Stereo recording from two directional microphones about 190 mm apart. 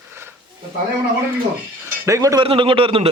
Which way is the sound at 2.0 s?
15° right (ahead or behind).